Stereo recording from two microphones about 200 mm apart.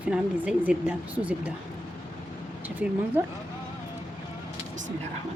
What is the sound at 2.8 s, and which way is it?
Speech, 5° right (ahead or behind).